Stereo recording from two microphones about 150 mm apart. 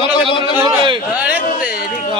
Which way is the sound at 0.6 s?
35° right (ahead or behind).